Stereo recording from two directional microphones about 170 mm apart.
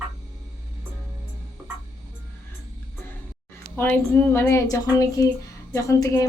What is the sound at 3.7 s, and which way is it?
A woman's voice, 10° left (ahead or behind).